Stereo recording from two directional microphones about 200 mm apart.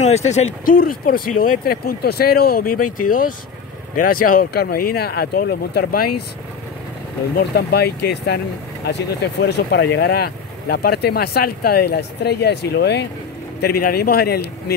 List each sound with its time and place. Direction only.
0.7 s speech: 45° left (ahead or behind)
7.3 s speech: 55° left (ahead or behind)